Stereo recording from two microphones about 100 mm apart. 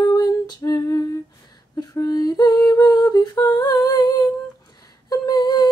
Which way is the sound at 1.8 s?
40° left (ahead or behind).